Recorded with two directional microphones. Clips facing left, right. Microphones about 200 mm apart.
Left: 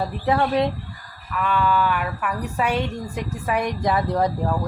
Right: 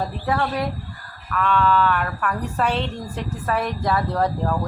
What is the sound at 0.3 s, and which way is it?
Speech, 20° left (ahead or behind).